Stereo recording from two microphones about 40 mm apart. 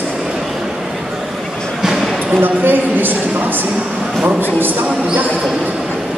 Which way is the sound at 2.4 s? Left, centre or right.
Right.